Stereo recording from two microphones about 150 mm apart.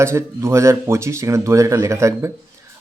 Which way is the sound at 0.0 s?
20° right (ahead or behind).